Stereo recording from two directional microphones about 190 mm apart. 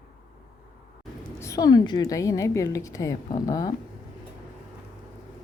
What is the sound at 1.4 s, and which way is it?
A woman's voice, 20° left (ahead or behind).